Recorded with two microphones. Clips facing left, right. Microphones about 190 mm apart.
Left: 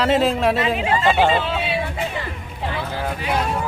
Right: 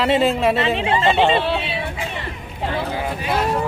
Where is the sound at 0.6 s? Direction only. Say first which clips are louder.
Right 1 dB; 25° right (ahead or behind).